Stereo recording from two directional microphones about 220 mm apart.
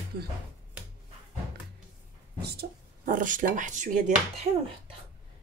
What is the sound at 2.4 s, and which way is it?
Speech, 45° right (ahead or behind).